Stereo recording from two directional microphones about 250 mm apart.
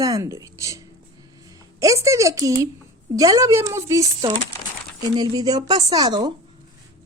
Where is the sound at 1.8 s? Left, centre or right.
Centre.